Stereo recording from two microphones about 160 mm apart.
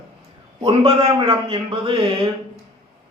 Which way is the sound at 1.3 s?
35° right (ahead or behind).